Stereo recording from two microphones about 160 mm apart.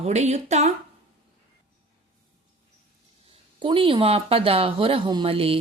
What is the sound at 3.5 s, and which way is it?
A woman's voice, 35° right (ahead or behind).